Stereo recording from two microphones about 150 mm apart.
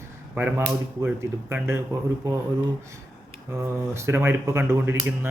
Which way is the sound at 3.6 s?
20° right (ahead or behind).